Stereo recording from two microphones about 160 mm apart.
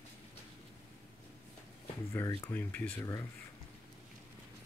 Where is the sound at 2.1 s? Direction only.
15° left (ahead or behind).